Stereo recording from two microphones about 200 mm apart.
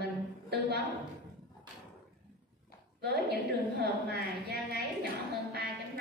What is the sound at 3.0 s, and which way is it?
A woman's voice, 55° right (ahead or behind).